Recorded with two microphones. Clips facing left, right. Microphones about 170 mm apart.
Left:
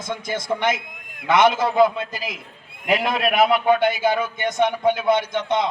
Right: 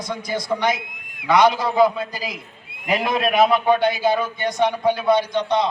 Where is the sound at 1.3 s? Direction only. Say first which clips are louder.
Right 1 dB; 25° left (ahead or behind).